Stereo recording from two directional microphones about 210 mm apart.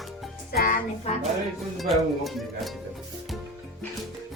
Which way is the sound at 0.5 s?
45° left (ahead or behind).